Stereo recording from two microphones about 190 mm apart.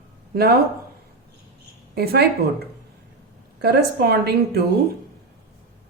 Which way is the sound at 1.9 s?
55° right (ahead or behind).